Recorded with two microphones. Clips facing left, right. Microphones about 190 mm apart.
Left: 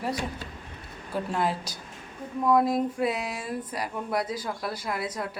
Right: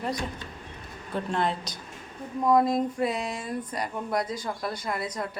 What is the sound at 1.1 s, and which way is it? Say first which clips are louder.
A woman's voice: even; 5° left (ahead or behind).